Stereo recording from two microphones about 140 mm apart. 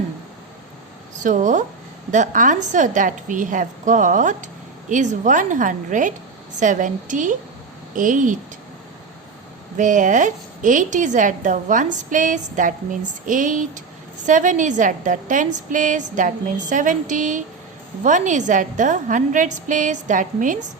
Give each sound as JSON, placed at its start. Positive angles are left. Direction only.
{"t": 1.2, "sound": "a woman's voice", "side_deg": -65}
{"t": 9.7, "sound": "a woman's voice", "side_deg": -65}